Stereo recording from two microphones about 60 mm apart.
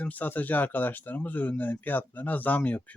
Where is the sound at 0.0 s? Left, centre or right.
Left.